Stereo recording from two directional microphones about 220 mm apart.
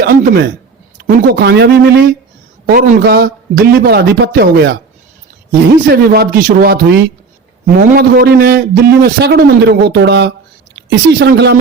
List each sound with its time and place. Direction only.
0.0 s a man's voice: 40° right (ahead or behind)